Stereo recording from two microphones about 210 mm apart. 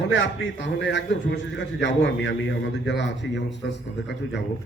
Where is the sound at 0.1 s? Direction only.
60° left (ahead or behind).